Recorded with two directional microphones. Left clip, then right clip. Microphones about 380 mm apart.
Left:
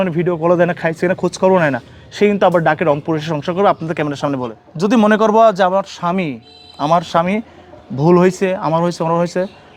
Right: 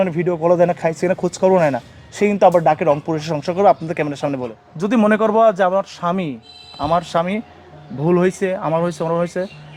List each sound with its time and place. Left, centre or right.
0.0 s speech: left
6.7 s speech: left